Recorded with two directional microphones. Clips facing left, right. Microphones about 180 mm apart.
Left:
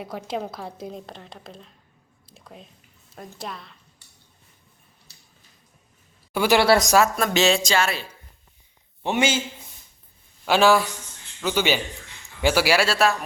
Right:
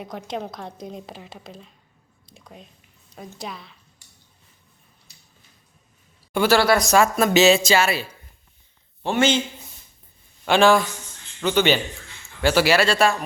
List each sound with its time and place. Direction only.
0.0 s a woman's voice: 5° left (ahead or behind)
2.2 s drip: centre (ahead or behind)
3.3 s a woman's voice: centre (ahead or behind)
6.3 s speech: 10° left (ahead or behind)
6.6 s speech: 25° left (ahead or behind)
6.9 s a woman's voice: centre (ahead or behind)
9.0 s a man's voice: 15° left (ahead or behind)
10.4 s a man's voice: 5° left (ahead or behind)